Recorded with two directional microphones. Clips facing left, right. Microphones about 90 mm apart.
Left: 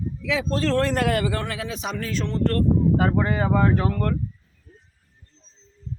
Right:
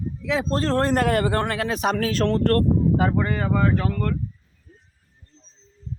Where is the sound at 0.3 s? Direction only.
40° right (ahead or behind); by 2.6 s 60° right (ahead or behind).